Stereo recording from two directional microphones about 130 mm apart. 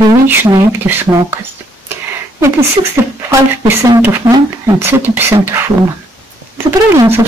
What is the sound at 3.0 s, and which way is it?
Speech, 20° right (ahead or behind).